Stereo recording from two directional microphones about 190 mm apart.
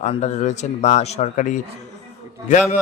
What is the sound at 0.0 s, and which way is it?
Speech, 35° left (ahead or behind).